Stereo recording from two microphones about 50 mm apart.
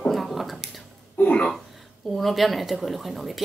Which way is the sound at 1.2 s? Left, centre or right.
Left.